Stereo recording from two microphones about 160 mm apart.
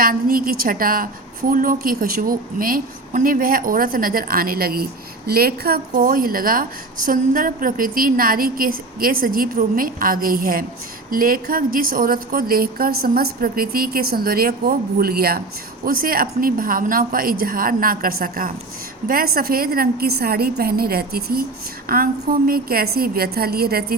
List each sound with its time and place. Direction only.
0.0 s a woman's voice: 65° right (ahead or behind)